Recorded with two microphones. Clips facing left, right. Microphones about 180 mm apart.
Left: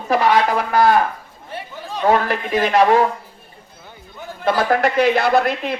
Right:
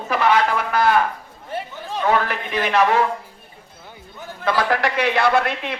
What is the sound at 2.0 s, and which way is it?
A man's voice, 40° left (ahead or behind).